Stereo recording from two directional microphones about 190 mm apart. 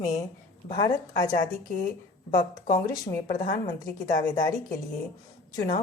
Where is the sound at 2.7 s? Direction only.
20° left (ahead or behind).